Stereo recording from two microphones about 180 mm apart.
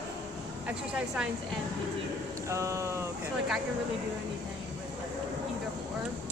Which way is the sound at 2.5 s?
15° right (ahead or behind).